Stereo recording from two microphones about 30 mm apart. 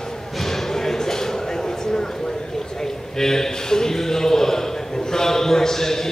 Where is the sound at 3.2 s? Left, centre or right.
Centre.